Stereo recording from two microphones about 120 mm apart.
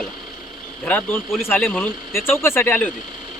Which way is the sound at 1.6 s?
5° left (ahead or behind).